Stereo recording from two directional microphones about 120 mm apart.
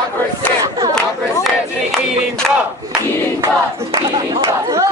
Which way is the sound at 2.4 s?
Centre (ahead or behind).